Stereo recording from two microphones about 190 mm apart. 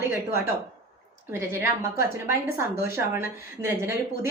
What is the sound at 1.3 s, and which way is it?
A woman's voice, 15° right (ahead or behind).